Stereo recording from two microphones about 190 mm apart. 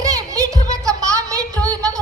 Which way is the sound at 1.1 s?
15° right (ahead or behind).